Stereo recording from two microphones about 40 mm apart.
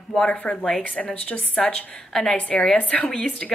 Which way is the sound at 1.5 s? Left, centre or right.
Left.